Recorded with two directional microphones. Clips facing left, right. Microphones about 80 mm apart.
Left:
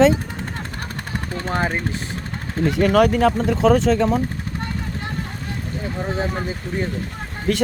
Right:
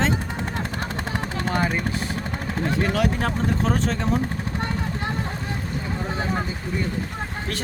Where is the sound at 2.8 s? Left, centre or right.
Left.